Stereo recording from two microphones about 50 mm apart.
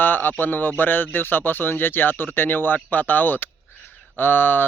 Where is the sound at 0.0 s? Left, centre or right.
Left.